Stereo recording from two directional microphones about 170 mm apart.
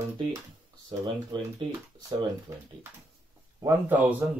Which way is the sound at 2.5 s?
15° right (ahead or behind).